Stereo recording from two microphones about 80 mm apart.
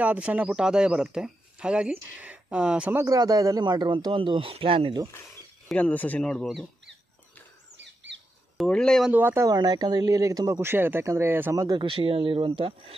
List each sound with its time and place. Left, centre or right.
0.0 s speech: centre
3.1 s speech: right
5.8 s speech: centre
6.4 s speech: centre
8.6 s speech: centre
9.1 s speech: right
9.5 s speech: right
11.5 s speech: right
11.8 s speech: right